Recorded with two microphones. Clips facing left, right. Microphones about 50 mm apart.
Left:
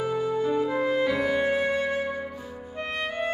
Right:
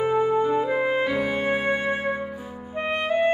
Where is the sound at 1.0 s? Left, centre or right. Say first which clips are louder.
Even; centre.